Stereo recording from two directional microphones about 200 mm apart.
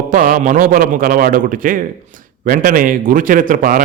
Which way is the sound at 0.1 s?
45° right (ahead or behind).